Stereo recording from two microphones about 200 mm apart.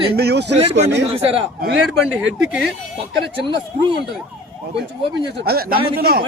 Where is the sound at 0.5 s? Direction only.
35° right (ahead or behind).